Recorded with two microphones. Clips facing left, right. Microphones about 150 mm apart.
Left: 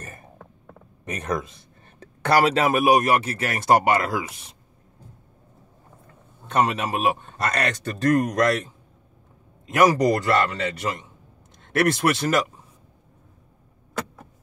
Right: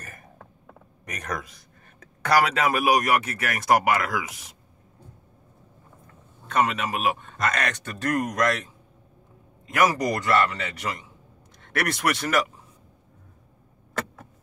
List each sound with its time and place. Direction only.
0.0 s a sound: 30° left (ahead or behind)
1.0 s speech: 25° left (ahead or behind)
6.4 s a man's voice: 30° left (ahead or behind)
9.7 s speech: 30° left (ahead or behind)